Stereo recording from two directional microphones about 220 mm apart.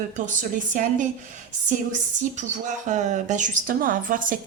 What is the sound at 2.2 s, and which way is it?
Speech, 35° right (ahead or behind).